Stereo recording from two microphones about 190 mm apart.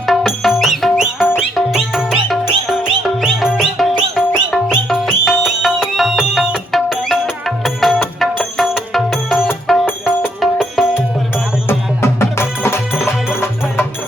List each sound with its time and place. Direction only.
0.0 s music: centre (ahead or behind)
11.7 s music: 15° left (ahead or behind)